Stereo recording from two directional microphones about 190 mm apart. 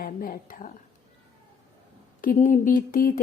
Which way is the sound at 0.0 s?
50° left (ahead or behind).